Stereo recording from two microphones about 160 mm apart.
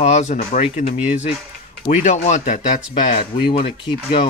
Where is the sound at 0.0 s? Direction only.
45° left (ahead or behind).